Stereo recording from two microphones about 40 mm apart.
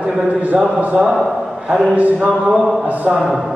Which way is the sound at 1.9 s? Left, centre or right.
Right.